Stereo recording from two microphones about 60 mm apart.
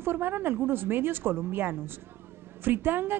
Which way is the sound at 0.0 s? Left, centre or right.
Right.